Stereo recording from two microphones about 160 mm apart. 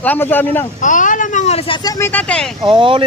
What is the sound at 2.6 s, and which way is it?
Speech, 35° right (ahead or behind).